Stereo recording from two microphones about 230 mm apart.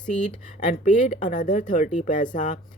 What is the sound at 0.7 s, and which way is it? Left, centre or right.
Speech, left.